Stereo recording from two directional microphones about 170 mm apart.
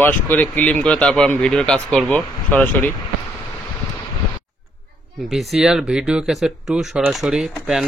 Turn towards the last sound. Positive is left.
turn(degrees=-5)  # may be behind; listen again after turning